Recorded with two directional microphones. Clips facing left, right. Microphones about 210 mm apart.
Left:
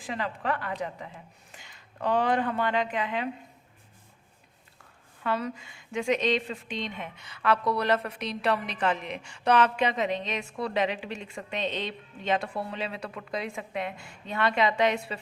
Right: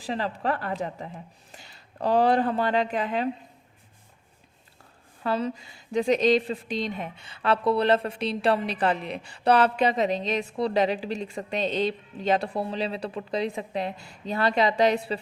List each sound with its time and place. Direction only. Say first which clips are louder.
0.0 s a woman's voice: right 4 dB; 35° right (ahead or behind)
5.2 s a woman's voice: right 3 dB; 30° right (ahead or behind)